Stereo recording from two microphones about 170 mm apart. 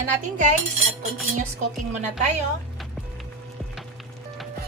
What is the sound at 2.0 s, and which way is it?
Speech, 40° right (ahead or behind).